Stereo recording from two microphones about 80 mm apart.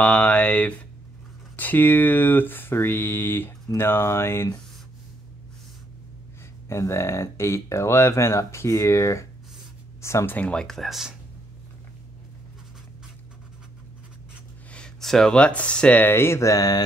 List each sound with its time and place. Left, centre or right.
0.0 s a sound: centre
1.6 s speech: left
6.7 s speech: left
10.3 s speech: centre
14.7 s speech: centre; by 16.8 s left